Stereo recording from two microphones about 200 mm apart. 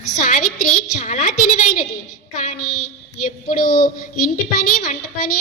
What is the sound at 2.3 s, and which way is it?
Music, 35° left (ahead or behind).